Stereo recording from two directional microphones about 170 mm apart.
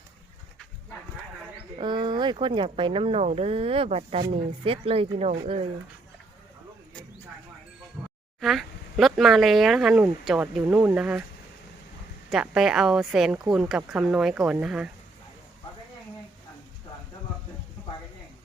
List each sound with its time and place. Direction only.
1.8 s speech: 25° right (ahead or behind)
8.0 s a sound: 10° right (ahead or behind)
8.4 s speech: centre (ahead or behind)
12.3 s speech: 5° right (ahead or behind)